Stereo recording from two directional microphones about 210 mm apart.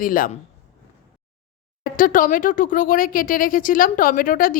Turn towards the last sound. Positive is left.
turn(degrees=40)  # may be behind; listen again after turning